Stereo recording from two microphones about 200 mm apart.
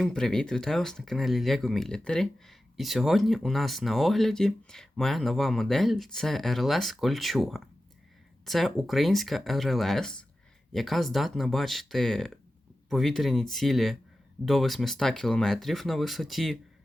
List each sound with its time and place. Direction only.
0.0 s speech: 5° left (ahead or behind)